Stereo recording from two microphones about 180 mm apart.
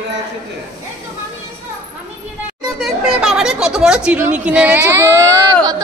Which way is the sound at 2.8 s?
Centre (ahead or behind).